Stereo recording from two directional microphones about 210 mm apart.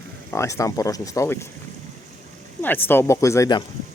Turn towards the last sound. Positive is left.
turn(degrees=15)  # may be behind; listen again after turning